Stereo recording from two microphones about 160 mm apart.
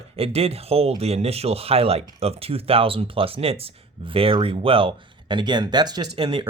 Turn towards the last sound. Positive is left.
turn(degrees=-30)  # may be behind; listen again after turning